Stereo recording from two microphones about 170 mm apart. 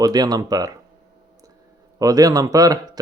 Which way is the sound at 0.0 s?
25° right (ahead or behind).